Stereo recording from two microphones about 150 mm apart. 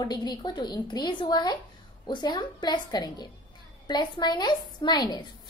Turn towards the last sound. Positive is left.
turn(degrees=30)  # may be behind; listen again after turning